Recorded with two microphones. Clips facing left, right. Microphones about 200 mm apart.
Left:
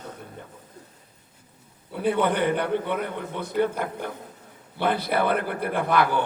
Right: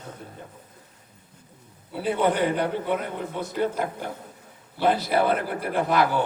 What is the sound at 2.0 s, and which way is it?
A man's voice, 60° left (ahead or behind).